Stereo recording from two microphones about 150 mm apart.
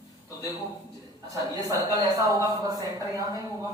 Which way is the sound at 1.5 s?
25° right (ahead or behind).